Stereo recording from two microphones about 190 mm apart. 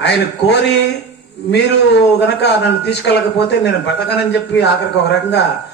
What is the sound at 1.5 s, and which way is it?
A man's voice, 60° left (ahead or behind).